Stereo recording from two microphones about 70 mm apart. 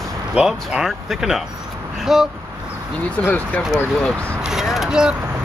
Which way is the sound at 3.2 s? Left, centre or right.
Left.